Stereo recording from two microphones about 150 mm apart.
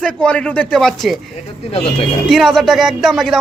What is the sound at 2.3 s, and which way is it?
A man's voice, centre (ahead or behind).